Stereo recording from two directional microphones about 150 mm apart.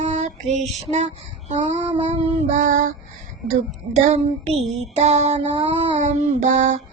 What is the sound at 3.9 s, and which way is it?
Child singing, 45° right (ahead or behind).